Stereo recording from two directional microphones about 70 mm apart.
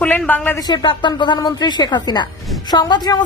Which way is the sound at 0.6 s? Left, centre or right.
Left.